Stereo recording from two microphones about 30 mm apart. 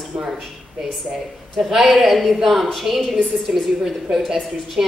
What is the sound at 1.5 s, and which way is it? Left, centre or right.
A woman's voice, centre.